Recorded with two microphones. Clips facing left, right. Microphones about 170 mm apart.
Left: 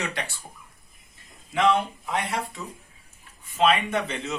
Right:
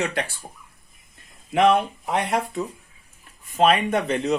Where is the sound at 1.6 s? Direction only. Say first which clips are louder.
Right 4 dB; 50° right (ahead or behind).